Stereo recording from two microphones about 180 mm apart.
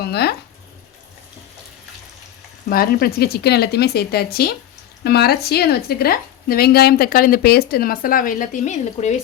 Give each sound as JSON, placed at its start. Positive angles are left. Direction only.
{"t": 0.0, "sound": "speech", "side_deg": 60}
{"t": 2.6, "sound": "speech", "side_deg": 55}